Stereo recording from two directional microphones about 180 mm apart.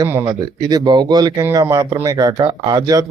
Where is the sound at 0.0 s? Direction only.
15° right (ahead or behind).